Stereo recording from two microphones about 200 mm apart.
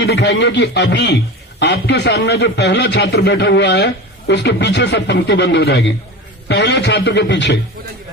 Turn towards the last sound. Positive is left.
turn(degrees=60)  # may be behind; listen again after turning